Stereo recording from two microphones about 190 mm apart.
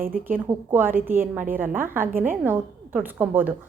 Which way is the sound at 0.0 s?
50° right (ahead or behind).